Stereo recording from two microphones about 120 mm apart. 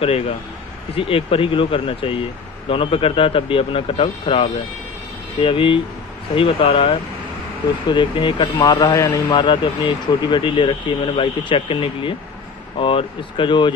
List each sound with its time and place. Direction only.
0.9 s a man's voice: 50° left (ahead or behind)